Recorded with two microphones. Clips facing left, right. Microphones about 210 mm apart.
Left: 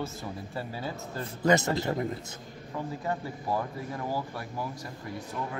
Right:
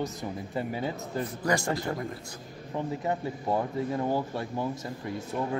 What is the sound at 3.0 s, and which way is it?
Speech, 25° right (ahead or behind).